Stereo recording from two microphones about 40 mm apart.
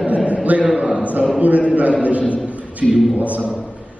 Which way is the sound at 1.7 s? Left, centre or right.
Right.